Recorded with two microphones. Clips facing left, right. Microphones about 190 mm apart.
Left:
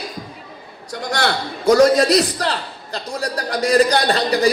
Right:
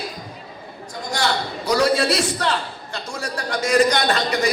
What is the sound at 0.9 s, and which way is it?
A man's voice, 65° left (ahead or behind).